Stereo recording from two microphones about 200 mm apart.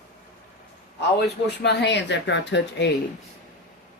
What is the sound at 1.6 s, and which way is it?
A woman's voice, 60° left (ahead or behind).